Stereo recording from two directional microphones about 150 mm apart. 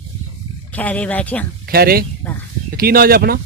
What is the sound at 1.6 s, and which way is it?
A man's voice, 90° right.